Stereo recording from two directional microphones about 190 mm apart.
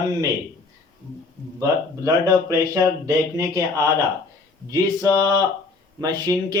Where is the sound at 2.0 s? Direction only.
15° right (ahead or behind).